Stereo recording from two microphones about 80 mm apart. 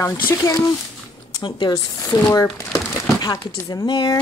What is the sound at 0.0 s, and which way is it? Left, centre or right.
Speech, left.